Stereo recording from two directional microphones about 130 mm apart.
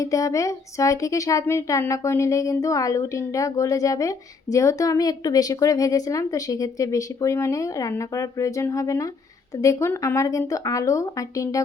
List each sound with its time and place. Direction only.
0.0 s a woman's voice: 25° left (ahead or behind)